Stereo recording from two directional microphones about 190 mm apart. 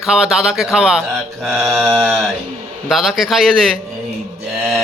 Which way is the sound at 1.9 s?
10° right (ahead or behind).